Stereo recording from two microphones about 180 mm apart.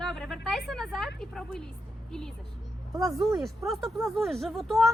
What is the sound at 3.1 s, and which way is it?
Speech, centre (ahead or behind).